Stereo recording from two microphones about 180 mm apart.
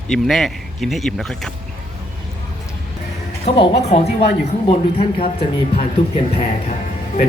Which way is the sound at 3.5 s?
35° left (ahead or behind).